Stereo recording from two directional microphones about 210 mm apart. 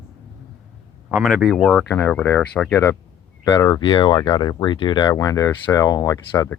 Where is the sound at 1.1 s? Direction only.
Centre (ahead or behind).